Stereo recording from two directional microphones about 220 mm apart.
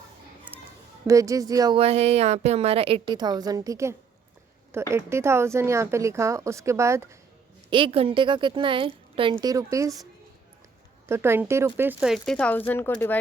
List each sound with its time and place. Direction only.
0.5 s a sound: 10° right (ahead or behind)
1.0 s a woman's voice: 15° right (ahead or behind)
7.7 s a woman's voice: 25° right (ahead or behind)
11.1 s speech: 10° right (ahead or behind); by 13.1 s 10° left (ahead or behind)